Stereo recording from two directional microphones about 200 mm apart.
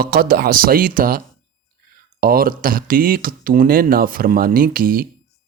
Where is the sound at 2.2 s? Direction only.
50° right (ahead or behind).